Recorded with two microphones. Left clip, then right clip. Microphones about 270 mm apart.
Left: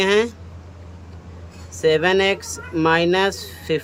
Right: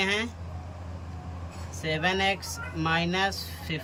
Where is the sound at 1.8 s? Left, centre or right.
Centre.